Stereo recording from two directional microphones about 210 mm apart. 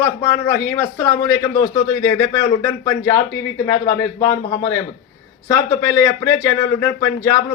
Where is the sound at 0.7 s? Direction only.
15° left (ahead or behind).